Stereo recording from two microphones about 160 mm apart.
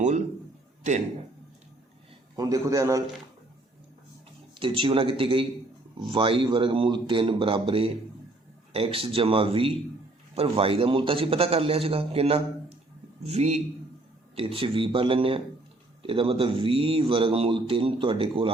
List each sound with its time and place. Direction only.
2.3 s a man's voice: 20° right (ahead or behind)
4.6 s a man's voice: 35° right (ahead or behind)